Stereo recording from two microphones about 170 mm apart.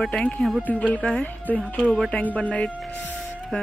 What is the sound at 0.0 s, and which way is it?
A woman's voice, 5° left (ahead or behind).